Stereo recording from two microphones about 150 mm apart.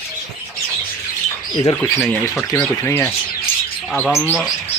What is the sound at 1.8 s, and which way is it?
Speech, 10° left (ahead or behind).